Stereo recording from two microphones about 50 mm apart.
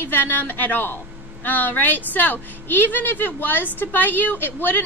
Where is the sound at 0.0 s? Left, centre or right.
Left.